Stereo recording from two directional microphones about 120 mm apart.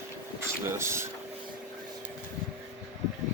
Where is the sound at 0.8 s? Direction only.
20° right (ahead or behind).